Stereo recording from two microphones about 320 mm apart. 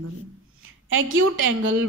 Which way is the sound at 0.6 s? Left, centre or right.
Right.